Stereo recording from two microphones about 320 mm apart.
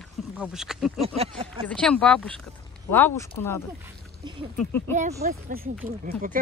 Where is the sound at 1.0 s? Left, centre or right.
Centre.